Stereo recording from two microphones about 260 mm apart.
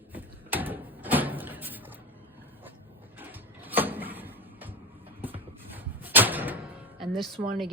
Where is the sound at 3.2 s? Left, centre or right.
Centre.